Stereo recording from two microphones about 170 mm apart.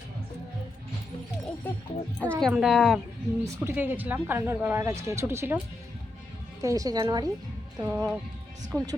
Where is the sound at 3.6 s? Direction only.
10° right (ahead or behind).